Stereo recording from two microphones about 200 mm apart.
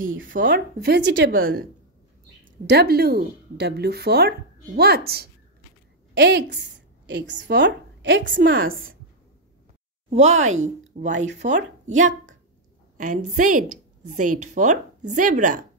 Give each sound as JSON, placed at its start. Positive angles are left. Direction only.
{"t": 0.0, "sound": "a woman's voice", "side_deg": -80}
{"t": 1.3, "sound": "a woman's voice", "side_deg": -45}
{"t": 8.4, "sound": "speech", "side_deg": -45}
{"t": 10.0, "sound": "speech", "side_deg": -35}
{"t": 12.9, "sound": "a sound", "side_deg": -40}
{"t": 13.3, "sound": "speech", "side_deg": -40}